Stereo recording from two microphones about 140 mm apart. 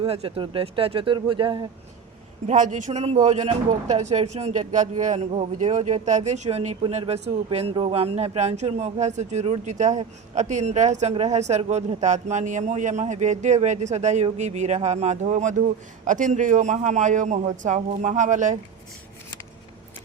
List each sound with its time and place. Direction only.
0.0 s speech: 45° right (ahead or behind)
2.5 s a man's voice: 60° right (ahead or behind)